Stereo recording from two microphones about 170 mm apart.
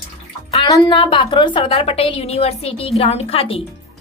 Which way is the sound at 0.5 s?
30° left (ahead or behind).